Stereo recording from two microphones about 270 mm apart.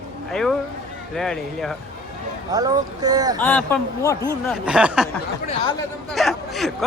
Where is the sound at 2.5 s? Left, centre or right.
Centre.